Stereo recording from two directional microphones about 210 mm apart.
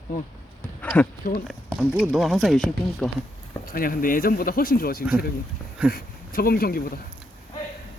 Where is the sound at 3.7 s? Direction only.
40° left (ahead or behind).